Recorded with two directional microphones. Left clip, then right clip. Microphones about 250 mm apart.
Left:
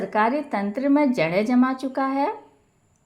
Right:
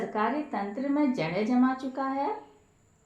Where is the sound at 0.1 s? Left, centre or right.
Left.